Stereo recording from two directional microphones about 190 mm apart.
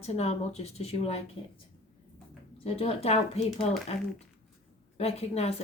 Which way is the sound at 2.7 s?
30° left (ahead or behind).